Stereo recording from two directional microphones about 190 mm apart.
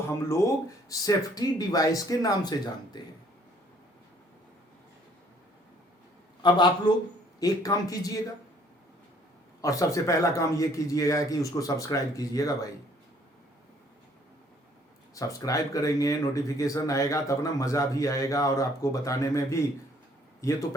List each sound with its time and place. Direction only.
0.3 s speech: 15° left (ahead or behind)
6.4 s speech: 25° left (ahead or behind)
9.6 s speech: 15° left (ahead or behind)
15.1 s speech: 15° left (ahead or behind)